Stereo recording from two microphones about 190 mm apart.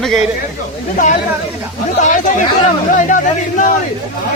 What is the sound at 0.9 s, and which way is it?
Speech, 40° left (ahead or behind).